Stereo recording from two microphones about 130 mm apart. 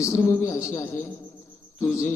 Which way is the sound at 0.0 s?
20° left (ahead or behind).